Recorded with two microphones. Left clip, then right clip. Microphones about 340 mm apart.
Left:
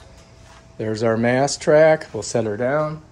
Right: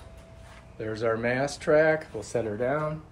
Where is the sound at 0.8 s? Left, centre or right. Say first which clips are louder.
Left 7 dB; left.